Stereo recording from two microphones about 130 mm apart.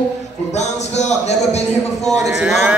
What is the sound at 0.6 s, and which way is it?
Speech, 60° left (ahead or behind).